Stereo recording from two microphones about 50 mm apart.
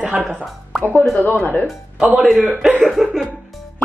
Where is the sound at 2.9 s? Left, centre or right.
Centre.